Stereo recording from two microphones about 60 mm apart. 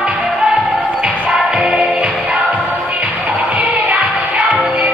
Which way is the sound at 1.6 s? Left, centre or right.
Centre.